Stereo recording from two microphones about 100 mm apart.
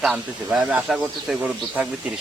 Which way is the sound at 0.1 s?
10° right (ahead or behind).